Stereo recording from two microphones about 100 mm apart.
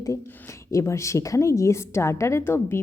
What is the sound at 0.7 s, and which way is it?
A woman's voice, 30° left (ahead or behind).